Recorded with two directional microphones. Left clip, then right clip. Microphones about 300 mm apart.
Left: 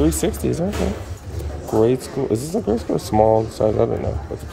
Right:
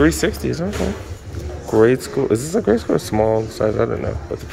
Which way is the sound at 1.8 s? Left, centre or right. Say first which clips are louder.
Right 4 dB; centre.